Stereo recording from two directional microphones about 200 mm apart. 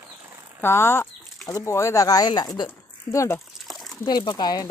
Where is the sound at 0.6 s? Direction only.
10° left (ahead or behind).